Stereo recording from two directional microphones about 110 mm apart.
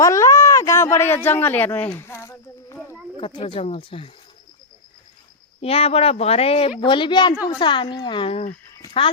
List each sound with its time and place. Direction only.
0.0 s speech: 30° left (ahead or behind)
3.2 s speech: 55° left (ahead or behind)
5.5 s speech: 65° left (ahead or behind); by 8.4 s 45° left (ahead or behind)